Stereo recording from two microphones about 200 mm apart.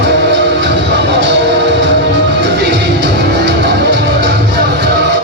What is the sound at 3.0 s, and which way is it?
Music, 60° right (ahead or behind).